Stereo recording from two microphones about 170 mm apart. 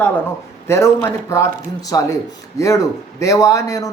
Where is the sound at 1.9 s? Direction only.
20° left (ahead or behind).